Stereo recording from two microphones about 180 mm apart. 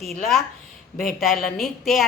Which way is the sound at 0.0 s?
Centre (ahead or behind).